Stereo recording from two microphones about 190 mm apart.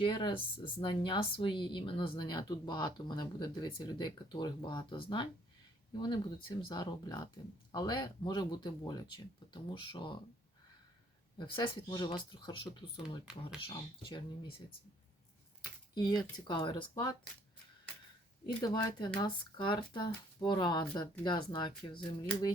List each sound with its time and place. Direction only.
0.0 s speech: 25° left (ahead or behind)
6.7 s speech: 20° left (ahead or behind)
11.3 s speech: 25° left (ahead or behind)
13.0 s speech: 5° right (ahead or behind)
16.0 s speech: 20° left (ahead or behind)
18.4 s speech: 20° left (ahead or behind)